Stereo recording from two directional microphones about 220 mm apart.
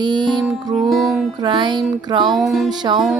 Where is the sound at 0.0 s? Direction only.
20° right (ahead or behind).